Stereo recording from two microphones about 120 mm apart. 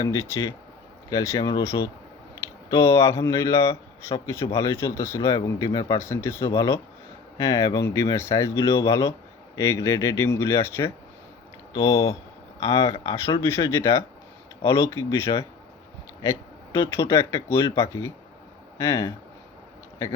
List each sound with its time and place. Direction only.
0.0 s a man's voice: 30° left (ahead or behind)
16.9 s a man's voice: 25° left (ahead or behind)